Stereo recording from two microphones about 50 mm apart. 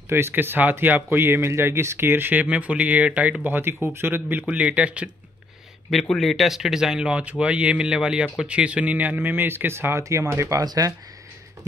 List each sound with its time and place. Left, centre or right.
0.1 s speech: right
2.4 s speech: right
3.4 s speech: right
4.5 s speech: right
6.1 s speech: centre; by 10.0 s right
10.0 s speech: right